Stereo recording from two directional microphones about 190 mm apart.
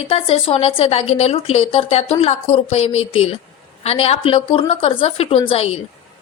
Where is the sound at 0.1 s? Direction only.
30° left (ahead or behind).